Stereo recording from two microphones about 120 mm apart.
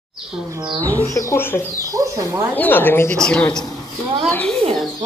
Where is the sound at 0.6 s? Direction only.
40° right (ahead or behind).